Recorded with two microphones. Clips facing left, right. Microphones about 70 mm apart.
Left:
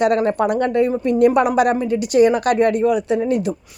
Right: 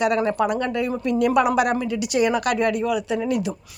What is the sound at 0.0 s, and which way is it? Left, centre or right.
Speech, left.